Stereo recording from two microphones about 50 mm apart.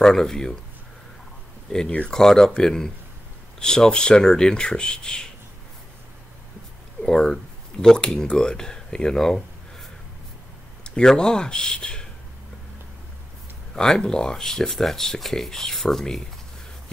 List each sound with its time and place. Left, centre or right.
0.0 s speech: centre
1.7 s speech: centre
7.0 s speech: centre
10.8 s speech: centre
13.7 s speech: centre